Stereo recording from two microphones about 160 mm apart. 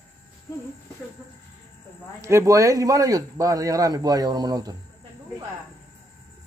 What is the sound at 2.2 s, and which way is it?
A man's voice, 15° right (ahead or behind).